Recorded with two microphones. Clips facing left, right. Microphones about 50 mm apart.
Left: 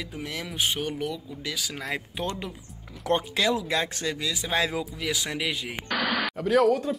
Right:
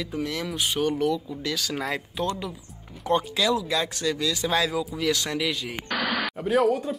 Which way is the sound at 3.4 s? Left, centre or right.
Left.